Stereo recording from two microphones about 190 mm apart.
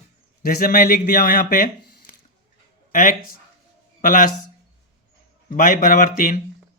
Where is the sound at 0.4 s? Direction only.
50° left (ahead or behind).